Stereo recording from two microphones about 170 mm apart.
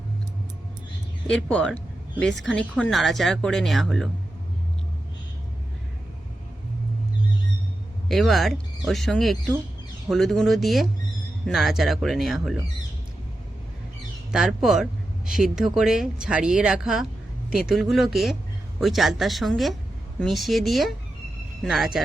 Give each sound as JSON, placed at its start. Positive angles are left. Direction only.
{"t": 1.3, "sound": "speech", "side_deg": 5}
{"t": 8.0, "sound": "speech", "side_deg": 0}
{"t": 14.3, "sound": "speech", "side_deg": 0}